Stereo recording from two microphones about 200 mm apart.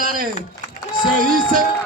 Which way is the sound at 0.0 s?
45° right (ahead or behind).